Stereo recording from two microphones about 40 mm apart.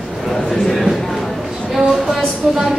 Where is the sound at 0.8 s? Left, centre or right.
Centre.